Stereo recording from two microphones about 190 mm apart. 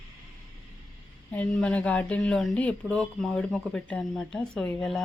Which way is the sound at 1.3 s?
5° left (ahead or behind).